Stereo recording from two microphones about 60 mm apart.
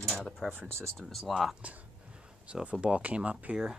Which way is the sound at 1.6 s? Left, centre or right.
Right.